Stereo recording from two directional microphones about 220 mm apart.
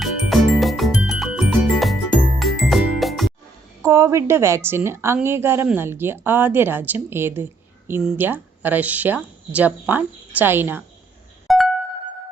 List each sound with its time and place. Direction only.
0.0 s music: centre (ahead or behind)
3.8 s a woman's voice: 10° right (ahead or behind)
11.4 s music: centre (ahead or behind)